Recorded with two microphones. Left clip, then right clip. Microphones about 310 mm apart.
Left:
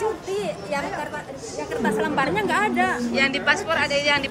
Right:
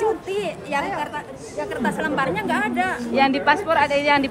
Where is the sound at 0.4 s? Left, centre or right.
Right.